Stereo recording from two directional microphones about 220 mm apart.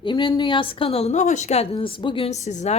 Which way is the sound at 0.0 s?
20° left (ahead or behind).